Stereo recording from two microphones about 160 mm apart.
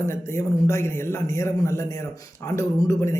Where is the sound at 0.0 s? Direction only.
15° left (ahead or behind).